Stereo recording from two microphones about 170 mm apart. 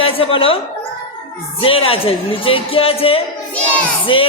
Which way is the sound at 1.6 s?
30° left (ahead or behind).